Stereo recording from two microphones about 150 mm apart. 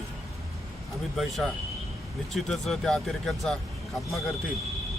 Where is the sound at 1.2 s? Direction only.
Centre (ahead or behind).